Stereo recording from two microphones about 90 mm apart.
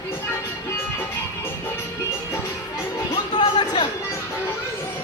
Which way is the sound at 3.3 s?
55° left (ahead or behind).